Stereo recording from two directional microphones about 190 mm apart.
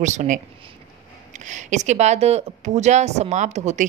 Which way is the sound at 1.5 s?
40° right (ahead or behind).